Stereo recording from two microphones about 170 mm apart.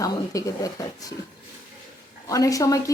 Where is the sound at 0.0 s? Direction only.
20° left (ahead or behind).